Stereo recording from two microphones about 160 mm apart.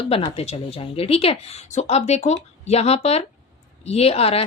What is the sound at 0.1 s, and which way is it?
Speech, 40° left (ahead or behind).